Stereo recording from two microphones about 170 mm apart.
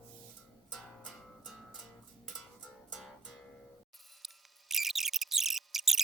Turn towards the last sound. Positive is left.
turn(degrees=0)  # may be behind; listen again after turning